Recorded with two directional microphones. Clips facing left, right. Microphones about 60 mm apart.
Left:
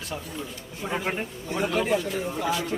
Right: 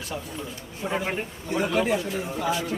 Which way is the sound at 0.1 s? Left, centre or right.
Centre.